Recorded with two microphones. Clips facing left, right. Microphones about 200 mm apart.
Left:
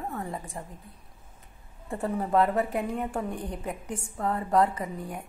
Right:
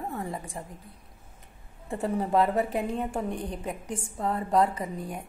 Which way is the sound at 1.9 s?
20° right (ahead or behind).